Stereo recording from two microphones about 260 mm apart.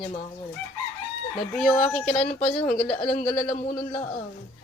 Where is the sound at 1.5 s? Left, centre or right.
Centre.